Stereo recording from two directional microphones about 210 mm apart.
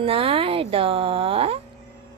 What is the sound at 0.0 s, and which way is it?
Speech, 25° right (ahead or behind).